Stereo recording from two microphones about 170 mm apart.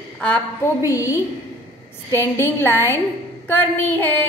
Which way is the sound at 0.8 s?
20° left (ahead or behind).